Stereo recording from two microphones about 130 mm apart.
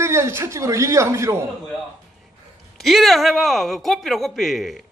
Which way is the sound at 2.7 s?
Centre (ahead or behind).